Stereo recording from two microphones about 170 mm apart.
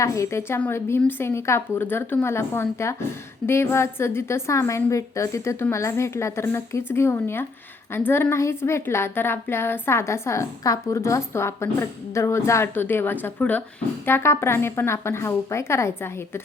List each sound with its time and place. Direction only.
0.0 s a woman's voice: 20° left (ahead or behind)